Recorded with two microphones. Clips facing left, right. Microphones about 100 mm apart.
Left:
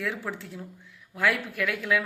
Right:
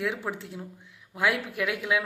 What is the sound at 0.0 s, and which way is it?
Speech, 15° right (ahead or behind).